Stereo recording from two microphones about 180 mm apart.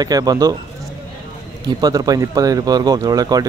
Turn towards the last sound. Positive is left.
turn(degrees=-20)  # may be behind; listen again after turning